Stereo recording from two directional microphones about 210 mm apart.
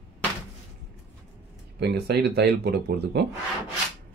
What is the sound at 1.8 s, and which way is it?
Speech, 50° right (ahead or behind).